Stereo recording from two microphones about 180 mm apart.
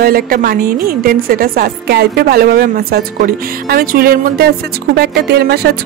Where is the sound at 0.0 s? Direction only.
55° right (ahead or behind).